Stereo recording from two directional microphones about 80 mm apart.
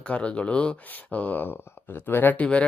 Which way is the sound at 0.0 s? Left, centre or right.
Centre.